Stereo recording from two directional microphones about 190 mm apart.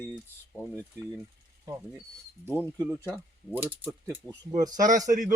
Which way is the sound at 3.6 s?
10° right (ahead or behind).